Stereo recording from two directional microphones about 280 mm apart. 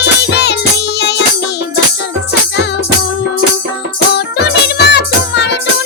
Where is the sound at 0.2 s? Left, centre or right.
Left.